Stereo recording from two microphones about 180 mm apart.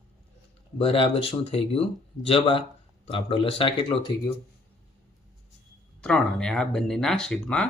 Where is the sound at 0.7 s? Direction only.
30° left (ahead or behind).